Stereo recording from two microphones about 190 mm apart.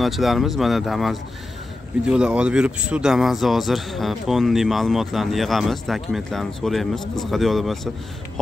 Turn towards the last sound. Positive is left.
turn(degrees=0)  # may be behind; listen again after turning